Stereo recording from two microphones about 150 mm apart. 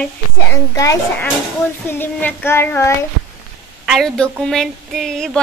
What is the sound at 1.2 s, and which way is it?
Speech, 15° left (ahead or behind).